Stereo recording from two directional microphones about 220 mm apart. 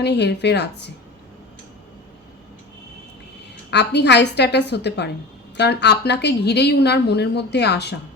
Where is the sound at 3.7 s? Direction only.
50° left (ahead or behind).